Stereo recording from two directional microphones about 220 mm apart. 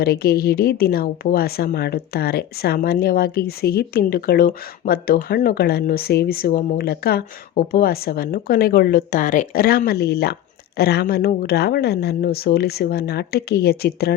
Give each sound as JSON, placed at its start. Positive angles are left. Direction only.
{"t": 0.0, "sound": "speech", "side_deg": 45}